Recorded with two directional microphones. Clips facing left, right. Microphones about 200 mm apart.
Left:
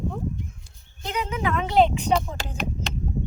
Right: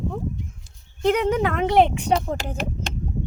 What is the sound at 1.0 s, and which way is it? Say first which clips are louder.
A woman's voice: right 8 dB; 60° right (ahead or behind).